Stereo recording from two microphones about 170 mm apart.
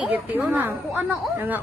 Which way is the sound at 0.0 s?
10° right (ahead or behind).